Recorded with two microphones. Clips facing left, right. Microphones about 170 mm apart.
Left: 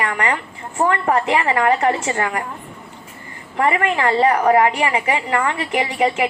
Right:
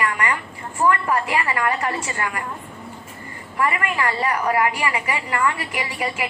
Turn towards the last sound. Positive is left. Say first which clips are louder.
# left 8 dB
turn(degrees=30)  # may be behind; listen again after turning